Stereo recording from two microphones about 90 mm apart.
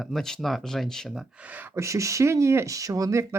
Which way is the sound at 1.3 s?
15° right (ahead or behind).